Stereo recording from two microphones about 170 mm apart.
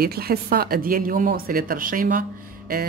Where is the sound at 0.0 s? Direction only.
65° right (ahead or behind).